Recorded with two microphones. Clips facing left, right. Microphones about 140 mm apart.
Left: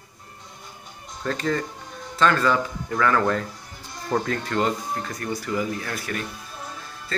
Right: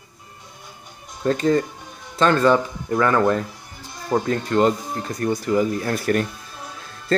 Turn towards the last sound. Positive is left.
turn(degrees=-30)  # may be behind; listen again after turning